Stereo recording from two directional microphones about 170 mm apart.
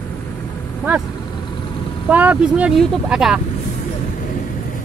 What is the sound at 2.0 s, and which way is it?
Speech, 10° right (ahead or behind).